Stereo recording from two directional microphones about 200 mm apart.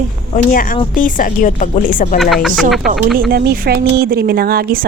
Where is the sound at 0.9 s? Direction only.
40° left (ahead or behind).